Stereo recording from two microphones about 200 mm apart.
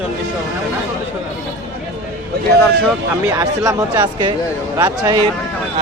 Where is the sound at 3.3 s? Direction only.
15° right (ahead or behind).